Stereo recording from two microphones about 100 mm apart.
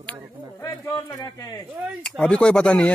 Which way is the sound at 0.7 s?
25° left (ahead or behind).